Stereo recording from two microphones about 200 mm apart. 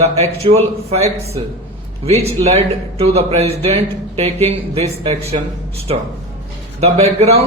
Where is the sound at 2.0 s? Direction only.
30° right (ahead or behind).